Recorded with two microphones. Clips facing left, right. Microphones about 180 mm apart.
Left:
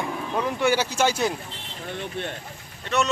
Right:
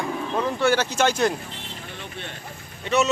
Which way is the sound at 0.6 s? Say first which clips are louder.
Right 1 dB; 10° left (ahead or behind).